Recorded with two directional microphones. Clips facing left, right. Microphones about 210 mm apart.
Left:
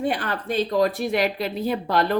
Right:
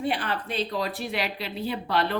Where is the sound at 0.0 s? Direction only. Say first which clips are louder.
Left 3 dB; 45° left (ahead or behind).